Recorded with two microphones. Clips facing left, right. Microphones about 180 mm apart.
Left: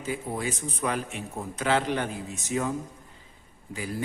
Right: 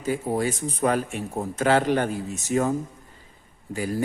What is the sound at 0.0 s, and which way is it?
A man's voice, 40° right (ahead or behind).